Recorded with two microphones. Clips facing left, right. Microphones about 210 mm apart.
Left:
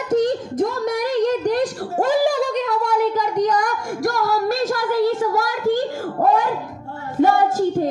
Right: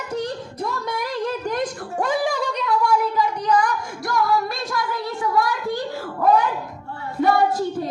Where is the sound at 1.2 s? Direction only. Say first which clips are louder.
Left 5 dB; 40° left (ahead or behind).